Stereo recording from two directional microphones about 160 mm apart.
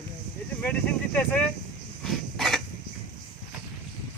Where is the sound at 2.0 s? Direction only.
Centre (ahead or behind).